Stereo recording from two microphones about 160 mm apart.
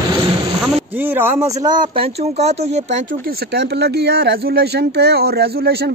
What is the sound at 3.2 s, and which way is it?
Speech, 80° right.